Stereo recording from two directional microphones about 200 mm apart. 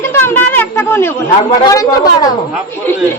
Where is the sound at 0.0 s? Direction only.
10° left (ahead or behind).